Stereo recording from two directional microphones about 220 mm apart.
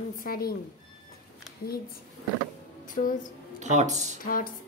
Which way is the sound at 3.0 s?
30° left (ahead or behind).